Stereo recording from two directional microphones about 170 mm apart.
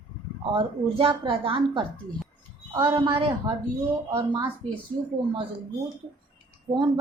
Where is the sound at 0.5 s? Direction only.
30° right (ahead or behind).